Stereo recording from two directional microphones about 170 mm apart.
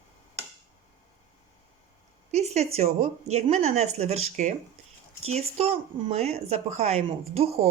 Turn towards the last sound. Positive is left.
turn(degrees=-35)  # may be behind; listen again after turning